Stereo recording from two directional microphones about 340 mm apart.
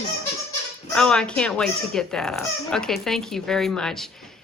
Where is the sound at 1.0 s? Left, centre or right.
Centre.